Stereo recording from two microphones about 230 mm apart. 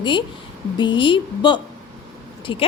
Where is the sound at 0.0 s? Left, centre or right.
Left.